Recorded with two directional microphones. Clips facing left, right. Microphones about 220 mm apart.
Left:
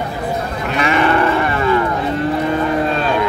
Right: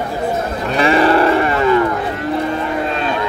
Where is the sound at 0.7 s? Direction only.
35° right (ahead or behind).